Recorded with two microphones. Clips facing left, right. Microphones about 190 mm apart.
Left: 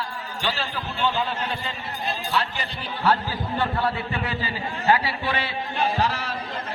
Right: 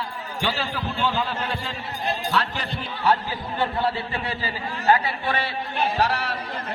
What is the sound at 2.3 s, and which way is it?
Speech, 5° left (ahead or behind).